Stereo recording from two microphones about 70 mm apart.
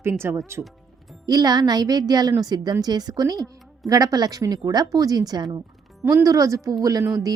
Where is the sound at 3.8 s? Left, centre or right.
Right.